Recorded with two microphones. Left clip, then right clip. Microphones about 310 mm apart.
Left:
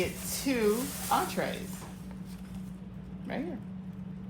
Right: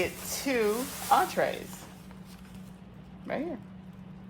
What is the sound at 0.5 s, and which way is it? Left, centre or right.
Speech, right.